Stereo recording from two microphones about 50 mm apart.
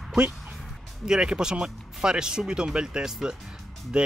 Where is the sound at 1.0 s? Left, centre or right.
Centre.